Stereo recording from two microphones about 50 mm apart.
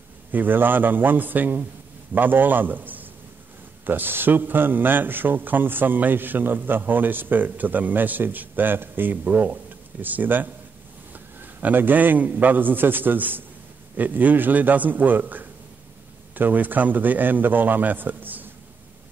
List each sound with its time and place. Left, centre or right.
0.3 s a man's voice: right